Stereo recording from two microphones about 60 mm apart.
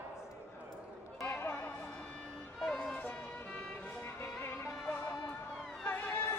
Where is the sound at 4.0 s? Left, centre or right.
Left.